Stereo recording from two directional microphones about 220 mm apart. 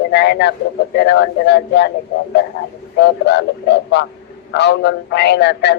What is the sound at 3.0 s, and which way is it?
Speech, 50° left (ahead or behind).